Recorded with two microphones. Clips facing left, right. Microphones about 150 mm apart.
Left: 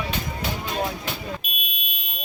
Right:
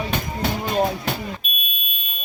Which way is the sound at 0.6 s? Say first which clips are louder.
Right 7 dB; 50° right (ahead or behind).